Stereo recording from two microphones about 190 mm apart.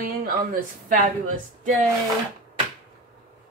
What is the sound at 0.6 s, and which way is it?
Speech, 45° right (ahead or behind).